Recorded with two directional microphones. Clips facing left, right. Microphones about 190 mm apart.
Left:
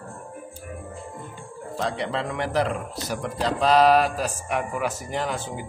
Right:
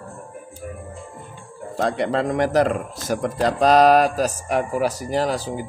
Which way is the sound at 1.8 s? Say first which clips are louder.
Right 6 dB; 50° right (ahead or behind).